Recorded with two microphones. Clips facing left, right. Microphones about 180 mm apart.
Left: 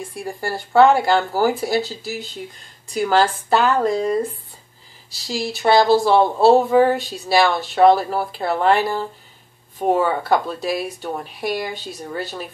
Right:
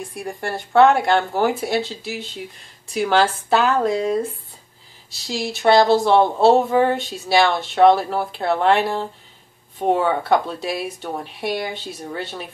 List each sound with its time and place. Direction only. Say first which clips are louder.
0.1 s speech: left 1 dB; centre (ahead or behind)